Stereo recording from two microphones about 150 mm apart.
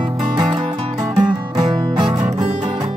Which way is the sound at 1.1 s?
30° right (ahead or behind).